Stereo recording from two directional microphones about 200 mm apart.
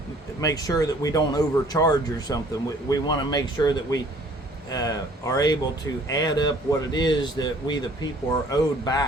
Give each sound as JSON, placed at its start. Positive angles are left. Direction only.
{"t": 0.4, "sound": "speech", "side_deg": 20}